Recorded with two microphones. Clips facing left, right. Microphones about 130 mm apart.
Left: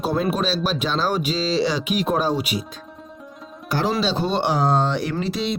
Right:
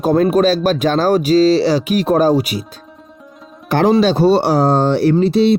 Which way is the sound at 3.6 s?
55° right (ahead or behind).